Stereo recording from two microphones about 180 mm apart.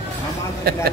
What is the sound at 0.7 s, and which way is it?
Speech, 60° right (ahead or behind).